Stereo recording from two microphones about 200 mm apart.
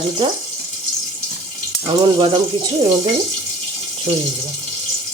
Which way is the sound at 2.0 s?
25° right (ahead or behind).